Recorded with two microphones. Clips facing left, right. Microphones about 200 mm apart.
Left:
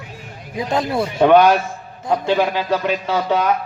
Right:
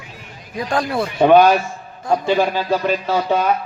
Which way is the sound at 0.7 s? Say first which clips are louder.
Even; 20° left (ahead or behind).